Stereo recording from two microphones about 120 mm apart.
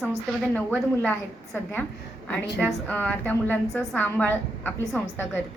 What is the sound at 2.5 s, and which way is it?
A woman's voice, 10° left (ahead or behind).